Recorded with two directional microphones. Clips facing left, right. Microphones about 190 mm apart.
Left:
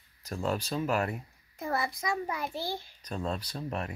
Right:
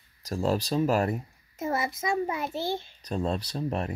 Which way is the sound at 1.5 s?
20° right (ahead or behind).